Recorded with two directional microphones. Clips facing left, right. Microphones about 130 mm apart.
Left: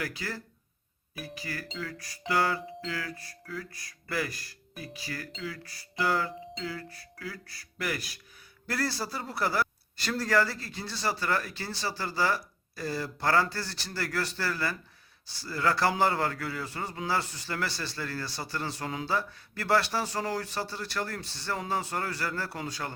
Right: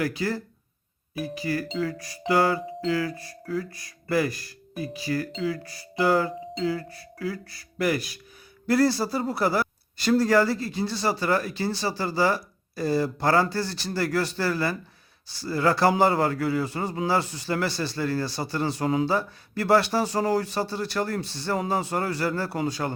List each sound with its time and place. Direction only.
0.0 s speech: 25° right (ahead or behind)
3.4 s music: 35° right (ahead or behind)
3.7 s speech: 20° right (ahead or behind)